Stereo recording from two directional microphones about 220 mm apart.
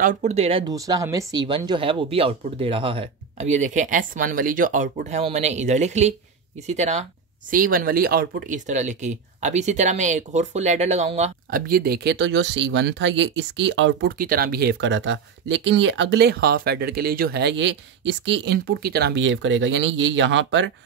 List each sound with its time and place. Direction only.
0.0 s speech: 35° right (ahead or behind); by 20.7 s 55° right (ahead or behind)